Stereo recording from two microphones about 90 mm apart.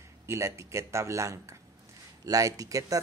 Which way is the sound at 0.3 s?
35° right (ahead or behind).